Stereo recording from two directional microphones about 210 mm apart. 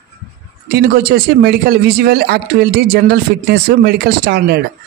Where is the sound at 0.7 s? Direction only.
45° right (ahead or behind).